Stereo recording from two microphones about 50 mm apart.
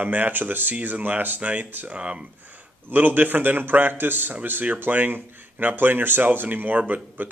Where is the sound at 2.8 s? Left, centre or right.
Right.